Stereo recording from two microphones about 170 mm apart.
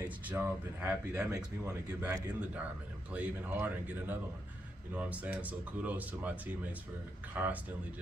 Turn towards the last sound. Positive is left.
turn(degrees=-10)  # may be behind; listen again after turning